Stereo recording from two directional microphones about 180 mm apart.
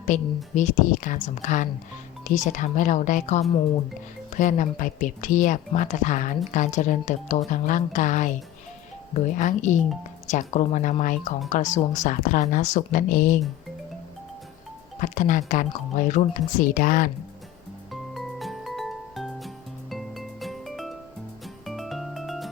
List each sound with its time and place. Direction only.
0.1 s a woman's voice: 40° left (ahead or behind)
14.9 s a woman's voice: 45° left (ahead or behind)
17.9 s music: centre (ahead or behind)